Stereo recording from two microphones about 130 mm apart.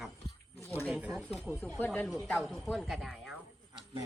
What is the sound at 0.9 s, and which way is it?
Speech, 10° right (ahead or behind).